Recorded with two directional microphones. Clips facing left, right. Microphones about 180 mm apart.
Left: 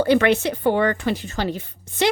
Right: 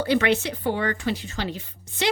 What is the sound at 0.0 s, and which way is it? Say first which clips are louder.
A woman's voice: left 5 dB; 50° left (ahead or behind).